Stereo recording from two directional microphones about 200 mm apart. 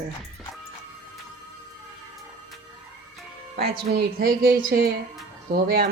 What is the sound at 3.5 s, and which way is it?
Speech, 50° right (ahead or behind).